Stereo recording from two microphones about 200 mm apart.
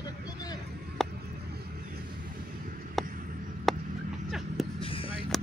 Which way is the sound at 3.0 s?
Centre (ahead or behind).